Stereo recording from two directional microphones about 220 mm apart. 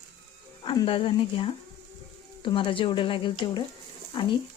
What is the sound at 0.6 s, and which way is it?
Speech, 20° left (ahead or behind).